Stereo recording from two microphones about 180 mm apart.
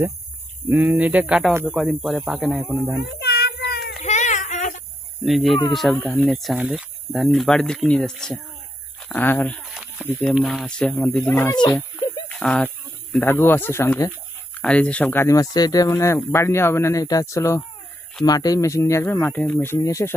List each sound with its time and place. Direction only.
0.7 s speech: 10° right (ahead or behind)
1.8 s speech: centre (ahead or behind)
3.2 s child singing: 65° left (ahead or behind)
4.0 s a sound: 40° left (ahead or behind)
5.2 s speech: centre (ahead or behind)
11.2 s speech: 20° left (ahead or behind)
12.3 s speech: 5° left (ahead or behind)